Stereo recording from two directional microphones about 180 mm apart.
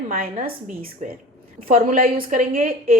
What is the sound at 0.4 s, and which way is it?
A woman's voice, 55° right (ahead or behind).